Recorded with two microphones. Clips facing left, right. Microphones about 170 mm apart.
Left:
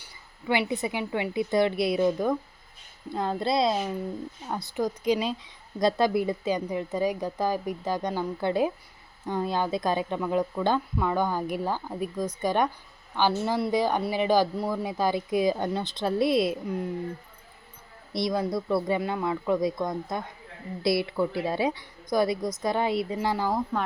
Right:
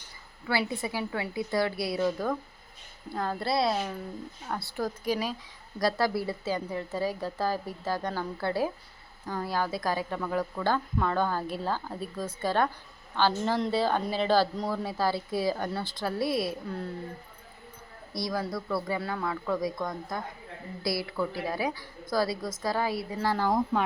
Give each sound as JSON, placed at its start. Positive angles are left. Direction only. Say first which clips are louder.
{"t": 0.0, "sound": "a woman's voice", "louder": "left 4 dB", "side_deg": 15}
{"t": 18.1, "sound": "a woman's voice", "louder": "left 5 dB", "side_deg": 20}